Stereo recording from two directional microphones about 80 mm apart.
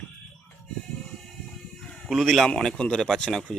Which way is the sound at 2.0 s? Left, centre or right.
Centre.